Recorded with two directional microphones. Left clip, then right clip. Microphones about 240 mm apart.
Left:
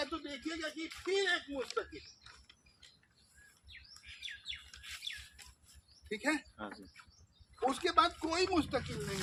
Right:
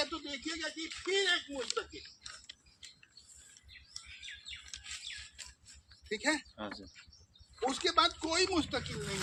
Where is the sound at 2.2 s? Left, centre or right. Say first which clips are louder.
Right 8 dB; right.